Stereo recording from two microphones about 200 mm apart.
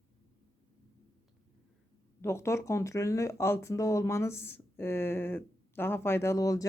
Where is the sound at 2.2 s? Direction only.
15° left (ahead or behind).